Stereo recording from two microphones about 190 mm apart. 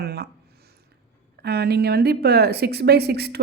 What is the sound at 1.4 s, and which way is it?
Speech, 60° right (ahead or behind).